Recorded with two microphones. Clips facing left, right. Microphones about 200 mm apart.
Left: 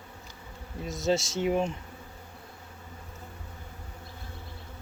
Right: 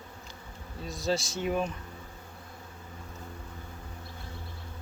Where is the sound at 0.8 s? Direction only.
20° left (ahead or behind).